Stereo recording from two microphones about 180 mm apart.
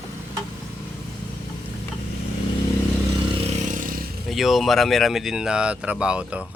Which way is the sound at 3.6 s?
45° right (ahead or behind).